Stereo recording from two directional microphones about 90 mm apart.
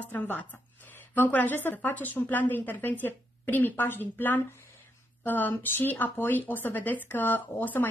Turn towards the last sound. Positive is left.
turn(degrees=20)  # may be behind; listen again after turning